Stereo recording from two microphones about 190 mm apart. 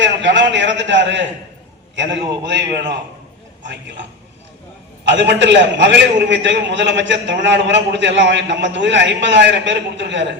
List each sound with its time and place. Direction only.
0.0 s a man's voice: 70° right (ahead or behind)
5.1 s a man's voice: 70° right (ahead or behind)